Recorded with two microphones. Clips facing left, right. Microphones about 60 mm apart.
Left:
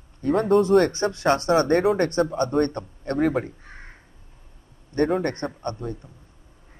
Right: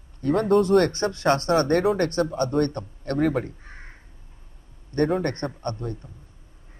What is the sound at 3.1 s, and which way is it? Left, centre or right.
Speech, centre.